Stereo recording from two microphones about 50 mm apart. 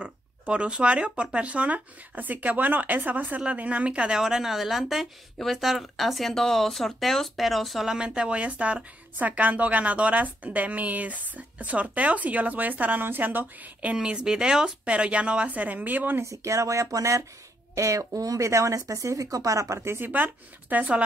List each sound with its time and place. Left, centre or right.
0.0 s speech: right
4.2 s speech: centre
7.9 s a woman's voice: centre
13.9 s speech: centre; by 16.2 s right
16.2 s speech: right
20.0 s a woman's voice: right
20.7 s speech: right